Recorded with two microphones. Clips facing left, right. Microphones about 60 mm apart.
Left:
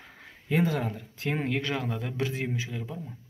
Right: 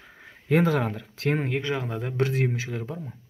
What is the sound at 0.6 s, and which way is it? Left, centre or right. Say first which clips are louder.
Speech: right 2 dB; right.